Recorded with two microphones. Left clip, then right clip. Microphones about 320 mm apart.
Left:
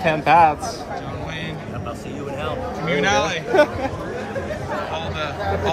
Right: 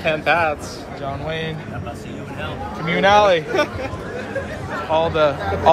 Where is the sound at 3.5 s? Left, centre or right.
Left.